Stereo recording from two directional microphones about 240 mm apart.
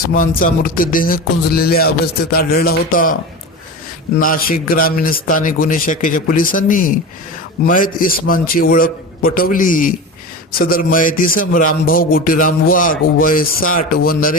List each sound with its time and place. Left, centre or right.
0.1 s music: left
4.2 s music: left